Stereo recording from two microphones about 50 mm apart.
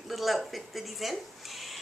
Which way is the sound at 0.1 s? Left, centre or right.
Centre.